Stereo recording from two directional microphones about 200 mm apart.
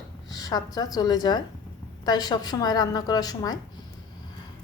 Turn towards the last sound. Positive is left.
turn(degrees=20)  # may be behind; listen again after turning